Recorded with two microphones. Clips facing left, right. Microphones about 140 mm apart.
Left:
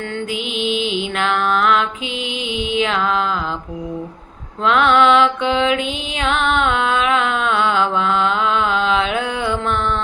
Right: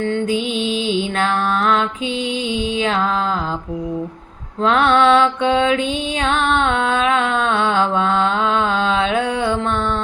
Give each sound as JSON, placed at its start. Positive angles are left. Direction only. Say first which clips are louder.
{"t": 0.6, "sound": "mantra", "louder": "right 1 dB", "side_deg": -30}
{"t": 4.6, "sound": "mantra", "louder": "even", "side_deg": -35}
{"t": 6.3, "sound": "music", "louder": "left 1 dB", "side_deg": -35}